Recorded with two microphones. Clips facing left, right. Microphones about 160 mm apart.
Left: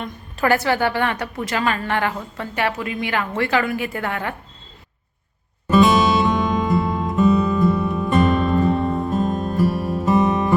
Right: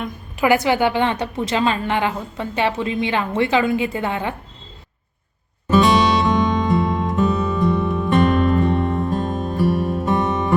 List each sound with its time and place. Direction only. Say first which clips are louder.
0.0 s a woman's voice: right 2 dB; 15° right (ahead or behind)
5.6 s music: even; centre (ahead or behind)